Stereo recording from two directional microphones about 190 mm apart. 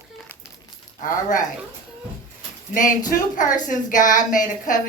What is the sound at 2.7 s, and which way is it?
A woman's voice, 45° left (ahead or behind).